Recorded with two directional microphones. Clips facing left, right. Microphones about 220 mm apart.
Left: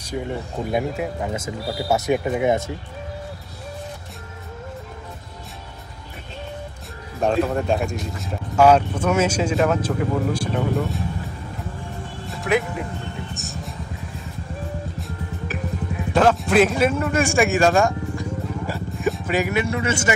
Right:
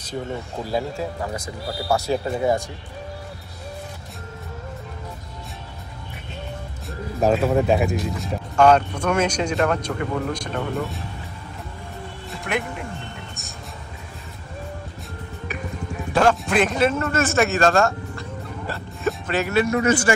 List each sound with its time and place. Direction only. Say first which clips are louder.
0.7 s speech: left 2 dB; 20° left (ahead or behind)
7.2 s speech: right 2 dB; 5° right (ahead or behind)
12.3 s speech: left 5 dB; centre (ahead or behind)
13.3 s music: left 6 dB; centre (ahead or behind)
15.0 s music: left 3 dB; centre (ahead or behind)
16.1 s a man's voice: left 1 dB; centre (ahead or behind)
18.9 s music: left 1 dB; centre (ahead or behind)
19.3 s speech: right 1 dB; 15° left (ahead or behind)